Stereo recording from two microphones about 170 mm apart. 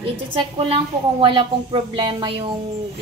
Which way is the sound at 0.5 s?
35° right (ahead or behind).